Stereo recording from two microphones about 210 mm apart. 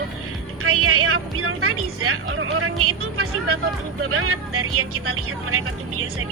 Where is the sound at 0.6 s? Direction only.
90° right.